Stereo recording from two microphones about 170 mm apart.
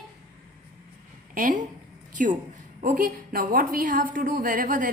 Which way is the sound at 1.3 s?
50° right (ahead or behind).